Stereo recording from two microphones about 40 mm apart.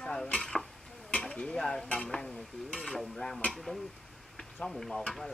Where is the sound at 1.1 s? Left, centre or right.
Left.